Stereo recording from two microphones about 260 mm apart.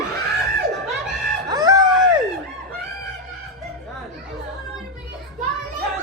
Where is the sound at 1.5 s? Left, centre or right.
Centre.